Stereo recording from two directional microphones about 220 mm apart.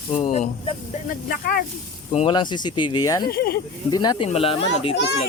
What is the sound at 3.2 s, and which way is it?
Speech, 45° left (ahead or behind).